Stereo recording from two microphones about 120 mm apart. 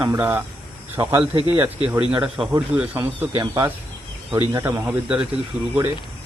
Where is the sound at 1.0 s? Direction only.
35° right (ahead or behind).